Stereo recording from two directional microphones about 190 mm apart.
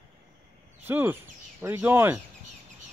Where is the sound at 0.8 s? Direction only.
10° right (ahead or behind).